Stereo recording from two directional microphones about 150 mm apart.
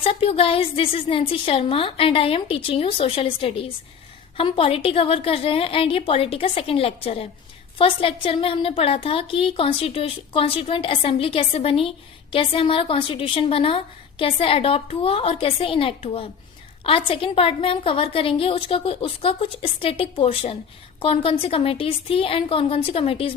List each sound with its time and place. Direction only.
0.0 s a woman's voice: 40° left (ahead or behind)